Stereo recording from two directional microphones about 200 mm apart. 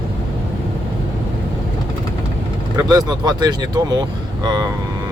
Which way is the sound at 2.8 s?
20° right (ahead or behind).